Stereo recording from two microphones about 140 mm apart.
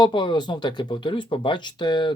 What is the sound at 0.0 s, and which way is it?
Speech, 35° left (ahead or behind).